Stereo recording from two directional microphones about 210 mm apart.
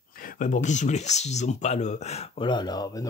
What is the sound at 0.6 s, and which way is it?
Speech, 35° left (ahead or behind).